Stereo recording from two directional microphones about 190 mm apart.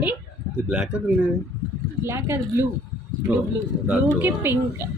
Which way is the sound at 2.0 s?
15° right (ahead or behind).